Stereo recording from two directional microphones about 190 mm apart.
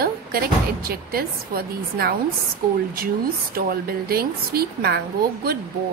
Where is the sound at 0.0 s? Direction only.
50° right (ahead or behind).